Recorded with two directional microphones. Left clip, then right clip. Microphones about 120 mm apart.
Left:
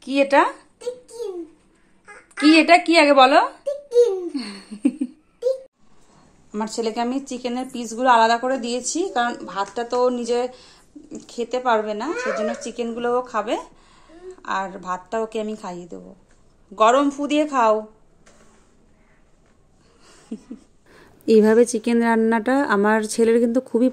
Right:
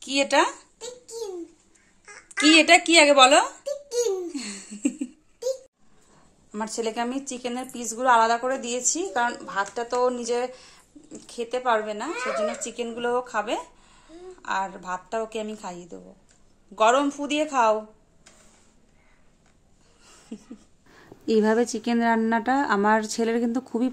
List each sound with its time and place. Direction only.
0.1 s speech: 5° right (ahead or behind)
2.0 s a sound: 5° left (ahead or behind)
2.9 s a woman's voice: 5° left (ahead or behind)
4.3 s laughter: centre (ahead or behind)
6.5 s a woman's voice: centre (ahead or behind)
11.1 s a woman's voice: 5° left (ahead or behind)
20.3 s a sound: 5° right (ahead or behind)
20.9 s speech: 35° left (ahead or behind)